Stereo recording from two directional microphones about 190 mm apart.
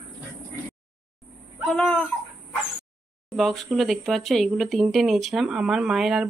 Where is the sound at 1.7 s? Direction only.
5° left (ahead or behind).